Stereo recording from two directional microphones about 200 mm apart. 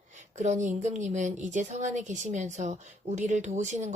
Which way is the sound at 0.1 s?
35° right (ahead or behind).